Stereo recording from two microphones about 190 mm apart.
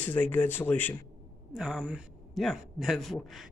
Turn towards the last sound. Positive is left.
turn(degrees=0)  # may be behind; listen again after turning